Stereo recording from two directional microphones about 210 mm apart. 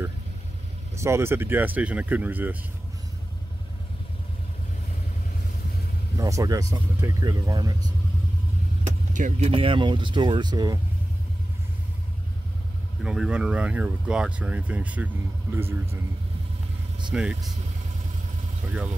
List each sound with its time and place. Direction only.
0.9 s speech: 15° right (ahead or behind)
6.1 s speech: 15° right (ahead or behind)
9.1 s speech: 35° right (ahead or behind)
9.5 s speech: 25° right (ahead or behind)
13.0 s speech: 5° right (ahead or behind)
17.1 s speech: 5° right (ahead or behind)